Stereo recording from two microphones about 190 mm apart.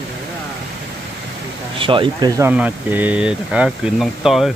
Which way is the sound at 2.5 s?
10° right (ahead or behind).